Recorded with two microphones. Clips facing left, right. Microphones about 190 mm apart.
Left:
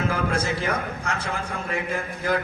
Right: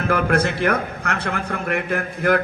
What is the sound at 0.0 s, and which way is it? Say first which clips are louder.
A man's voice: right 5 dB; 60° right (ahead or behind).